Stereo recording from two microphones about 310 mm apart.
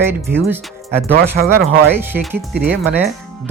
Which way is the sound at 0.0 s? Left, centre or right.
Centre.